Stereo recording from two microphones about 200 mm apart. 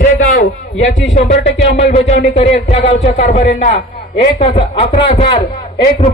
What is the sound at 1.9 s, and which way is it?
A man's voice, 35° left (ahead or behind).